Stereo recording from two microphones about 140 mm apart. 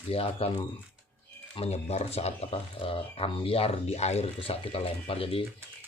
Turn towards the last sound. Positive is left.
turn(degrees=40)  # may be behind; listen again after turning